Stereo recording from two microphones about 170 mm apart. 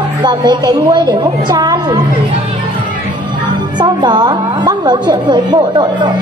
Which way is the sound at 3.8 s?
25° right (ahead or behind).